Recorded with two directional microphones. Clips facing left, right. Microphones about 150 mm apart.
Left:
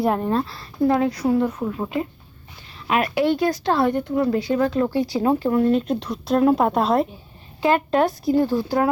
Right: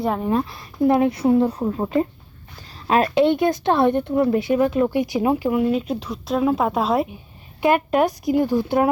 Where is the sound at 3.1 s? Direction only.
20° right (ahead or behind); by 7.1 s centre (ahead or behind).